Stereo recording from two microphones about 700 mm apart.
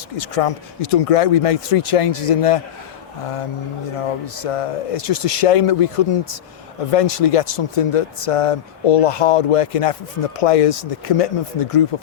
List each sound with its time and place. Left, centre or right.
0.2 s speech: left
4.4 s speech: left